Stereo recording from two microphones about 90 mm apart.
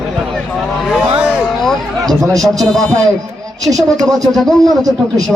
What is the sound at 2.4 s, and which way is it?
Speech, 5° left (ahead or behind).